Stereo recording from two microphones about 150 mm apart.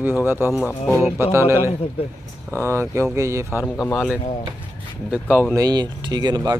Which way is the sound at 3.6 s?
15° left (ahead or behind).